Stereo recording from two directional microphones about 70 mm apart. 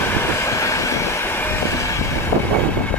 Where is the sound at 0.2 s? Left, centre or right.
Left.